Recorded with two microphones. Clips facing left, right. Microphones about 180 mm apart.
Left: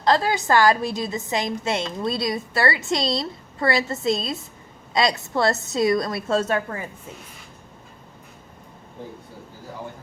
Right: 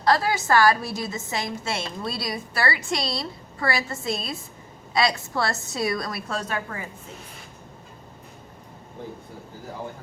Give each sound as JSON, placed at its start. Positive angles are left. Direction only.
{"t": 0.0, "sound": "a woman's voice", "side_deg": 20}